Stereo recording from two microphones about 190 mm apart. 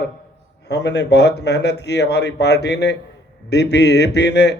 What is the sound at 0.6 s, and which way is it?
Speech, 65° left (ahead or behind).